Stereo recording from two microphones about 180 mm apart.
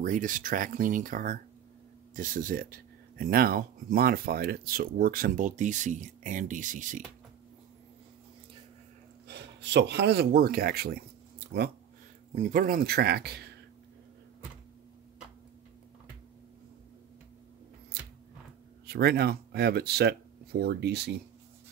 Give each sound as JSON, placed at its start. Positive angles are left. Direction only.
{"t": 0.0, "sound": "speech", "side_deg": -45}
{"t": 9.3, "sound": "speech", "side_deg": -75}
{"t": 12.4, "sound": "speech", "side_deg": -50}
{"t": 17.9, "sound": "chewing", "side_deg": -60}
{"t": 18.9, "sound": "speech", "side_deg": -60}